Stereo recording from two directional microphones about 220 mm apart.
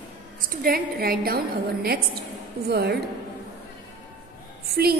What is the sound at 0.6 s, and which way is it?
Speech, 45° right (ahead or behind).